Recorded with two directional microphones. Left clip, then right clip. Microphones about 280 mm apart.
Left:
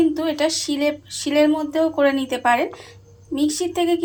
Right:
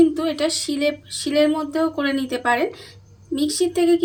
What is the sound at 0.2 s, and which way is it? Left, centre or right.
A woman's voice, centre.